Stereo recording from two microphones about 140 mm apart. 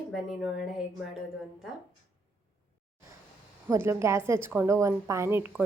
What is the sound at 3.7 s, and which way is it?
A woman's voice, 20° right (ahead or behind).